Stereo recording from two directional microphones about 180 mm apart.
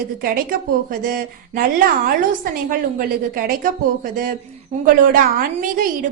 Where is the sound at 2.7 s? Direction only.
50° right (ahead or behind).